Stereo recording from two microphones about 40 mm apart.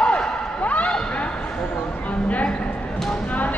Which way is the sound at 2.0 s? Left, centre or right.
Left.